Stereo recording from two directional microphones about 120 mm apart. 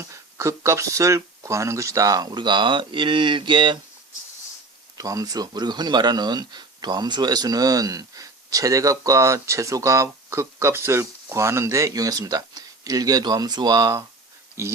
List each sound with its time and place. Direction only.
0.1 s speech: 25° right (ahead or behind); by 3.8 s 40° right (ahead or behind)
4.9 s speech: 30° right (ahead or behind)